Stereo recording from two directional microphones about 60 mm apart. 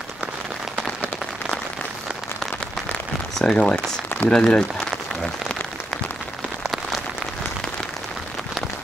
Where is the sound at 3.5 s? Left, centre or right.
Centre.